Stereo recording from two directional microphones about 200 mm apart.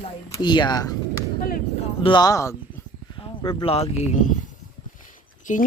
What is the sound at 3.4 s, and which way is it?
Speech, 30° left (ahead or behind).